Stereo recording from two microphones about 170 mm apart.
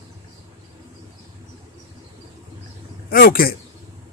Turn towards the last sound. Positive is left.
turn(degrees=60)  # may be behind; listen again after turning